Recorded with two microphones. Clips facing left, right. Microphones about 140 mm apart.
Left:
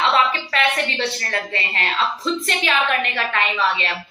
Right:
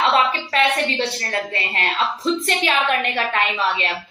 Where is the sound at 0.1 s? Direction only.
35° right (ahead or behind).